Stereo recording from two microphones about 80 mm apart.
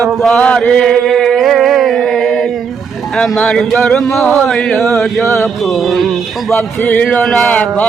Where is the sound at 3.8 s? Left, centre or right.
Centre.